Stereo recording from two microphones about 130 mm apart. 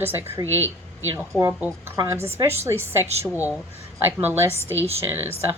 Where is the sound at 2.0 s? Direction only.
20° right (ahead or behind).